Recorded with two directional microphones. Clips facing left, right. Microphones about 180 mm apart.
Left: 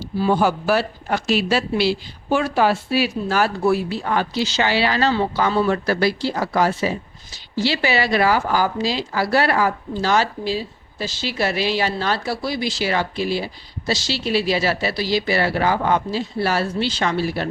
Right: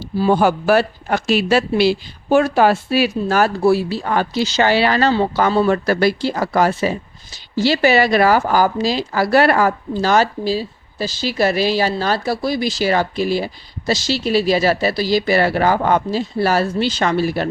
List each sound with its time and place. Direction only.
0.2 s speech: 50° right (ahead or behind)
3.6 s speech: 30° right (ahead or behind); by 17.5 s 50° right (ahead or behind)